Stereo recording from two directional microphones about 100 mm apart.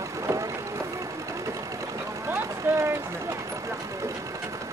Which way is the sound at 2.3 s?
25° right (ahead or behind).